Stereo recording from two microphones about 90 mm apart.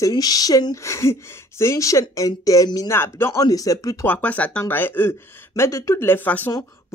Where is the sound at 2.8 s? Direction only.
30° left (ahead or behind).